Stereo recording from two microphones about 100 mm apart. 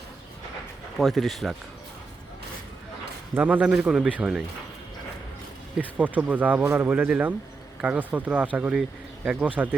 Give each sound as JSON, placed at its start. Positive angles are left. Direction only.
{"t": 0.9, "sound": "speech", "side_deg": 0}
{"t": 3.3, "sound": "speech", "side_deg": -15}
{"t": 5.8, "sound": "speech", "side_deg": -15}